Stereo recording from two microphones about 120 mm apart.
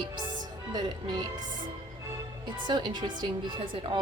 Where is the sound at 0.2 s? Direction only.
35° right (ahead or behind).